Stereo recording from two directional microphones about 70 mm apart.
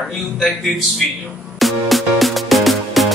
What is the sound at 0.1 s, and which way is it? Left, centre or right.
Speech, centre.